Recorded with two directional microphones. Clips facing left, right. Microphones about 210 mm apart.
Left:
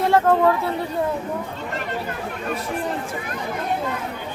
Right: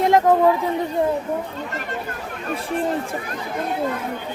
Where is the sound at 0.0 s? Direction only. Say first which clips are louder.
Right 2 dB; 15° right (ahead or behind).